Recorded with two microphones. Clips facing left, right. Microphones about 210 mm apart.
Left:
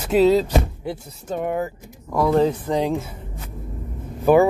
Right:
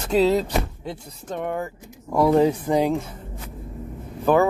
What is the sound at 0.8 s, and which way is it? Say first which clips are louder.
Speech: left 4 dB; 5° left (ahead or behind).